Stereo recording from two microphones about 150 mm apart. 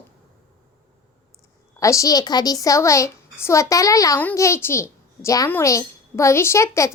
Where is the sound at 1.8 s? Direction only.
20° left (ahead or behind).